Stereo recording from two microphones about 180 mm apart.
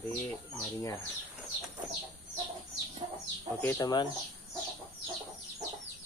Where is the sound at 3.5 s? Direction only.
10° left (ahead or behind).